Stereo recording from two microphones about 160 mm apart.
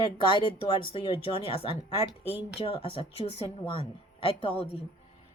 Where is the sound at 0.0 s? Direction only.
30° left (ahead or behind).